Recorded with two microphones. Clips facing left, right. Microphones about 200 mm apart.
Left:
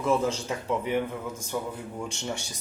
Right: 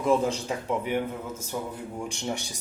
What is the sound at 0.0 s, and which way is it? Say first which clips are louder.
A man's voice: right 2 dB; 15° right (ahead or behind).